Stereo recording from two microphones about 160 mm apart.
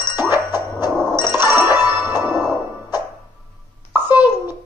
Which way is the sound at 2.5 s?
25° left (ahead or behind).